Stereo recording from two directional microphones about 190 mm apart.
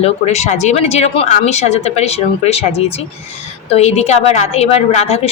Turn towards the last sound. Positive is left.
turn(degrees=35)  # may be behind; listen again after turning